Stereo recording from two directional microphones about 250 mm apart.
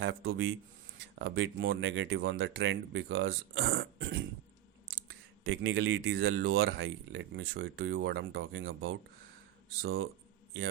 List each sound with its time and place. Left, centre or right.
0.0 s speech: right
3.6 s a sound: right
5.5 s speech: right